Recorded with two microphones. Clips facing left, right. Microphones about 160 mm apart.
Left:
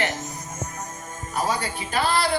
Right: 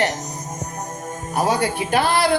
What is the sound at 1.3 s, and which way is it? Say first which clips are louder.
Speech: right 6 dB; 70° right (ahead or behind).